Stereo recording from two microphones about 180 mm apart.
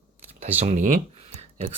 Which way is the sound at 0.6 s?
40° right (ahead or behind).